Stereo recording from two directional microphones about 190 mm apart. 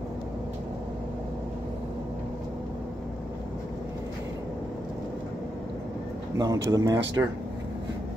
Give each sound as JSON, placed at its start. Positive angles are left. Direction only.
{"t": 6.3, "sound": "speech", "side_deg": -20}